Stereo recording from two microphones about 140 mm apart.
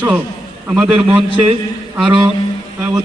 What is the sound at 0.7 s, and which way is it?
Speech, 10° right (ahead or behind).